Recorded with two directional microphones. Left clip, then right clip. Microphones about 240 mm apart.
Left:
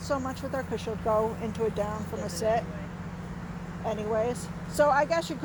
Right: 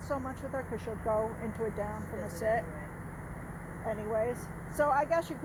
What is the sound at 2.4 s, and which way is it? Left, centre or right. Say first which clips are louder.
Speech: left 4 dB; left.